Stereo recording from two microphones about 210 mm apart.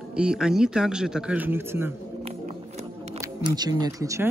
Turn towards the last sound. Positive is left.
turn(degrees=-15)  # may be behind; listen again after turning